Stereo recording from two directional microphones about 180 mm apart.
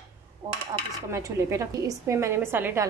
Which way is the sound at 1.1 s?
15° right (ahead or behind).